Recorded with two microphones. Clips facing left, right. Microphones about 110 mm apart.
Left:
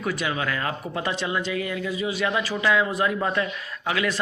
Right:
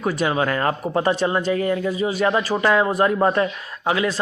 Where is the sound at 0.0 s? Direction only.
40° right (ahead or behind).